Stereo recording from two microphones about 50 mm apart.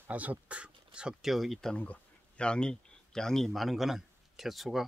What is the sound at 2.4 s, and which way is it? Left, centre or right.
A man's voice, centre.